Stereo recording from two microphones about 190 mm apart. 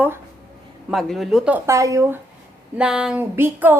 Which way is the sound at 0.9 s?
Centre (ahead or behind).